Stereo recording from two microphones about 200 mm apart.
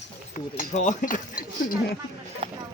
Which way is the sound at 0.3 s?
40° left (ahead or behind).